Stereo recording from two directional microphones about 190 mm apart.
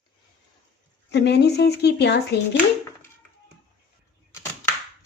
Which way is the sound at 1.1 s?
65° left (ahead or behind).